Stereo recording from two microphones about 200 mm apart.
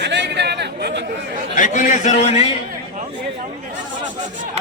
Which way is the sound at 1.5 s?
40° left (ahead or behind).